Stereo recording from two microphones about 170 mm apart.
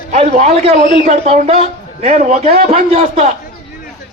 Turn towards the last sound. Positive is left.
turn(degrees=-40)  # may be behind; listen again after turning